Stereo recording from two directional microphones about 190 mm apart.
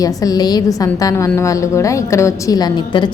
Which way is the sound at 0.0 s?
20° left (ahead or behind).